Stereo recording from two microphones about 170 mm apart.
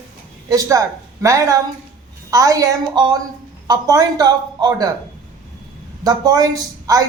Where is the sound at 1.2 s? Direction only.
20° right (ahead or behind).